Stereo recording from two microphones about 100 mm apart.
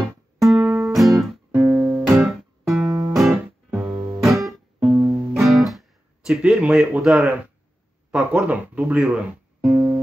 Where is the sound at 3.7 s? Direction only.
20° right (ahead or behind).